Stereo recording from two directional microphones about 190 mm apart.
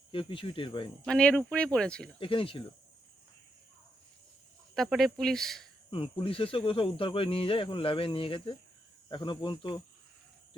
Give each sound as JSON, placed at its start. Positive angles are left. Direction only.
{"t": 0.1, "sound": "speech", "side_deg": 25}
{"t": 1.0, "sound": "speech", "side_deg": 5}
{"t": 2.1, "sound": "speech", "side_deg": 30}
{"t": 4.7, "sound": "speech", "side_deg": 0}
{"t": 5.9, "sound": "speech", "side_deg": 25}